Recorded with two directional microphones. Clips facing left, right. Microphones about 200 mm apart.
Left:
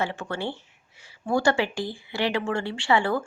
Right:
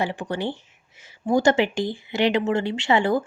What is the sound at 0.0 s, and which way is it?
Speech, 15° right (ahead or behind).